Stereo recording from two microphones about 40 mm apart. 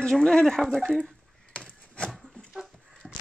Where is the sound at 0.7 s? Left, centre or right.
Centre.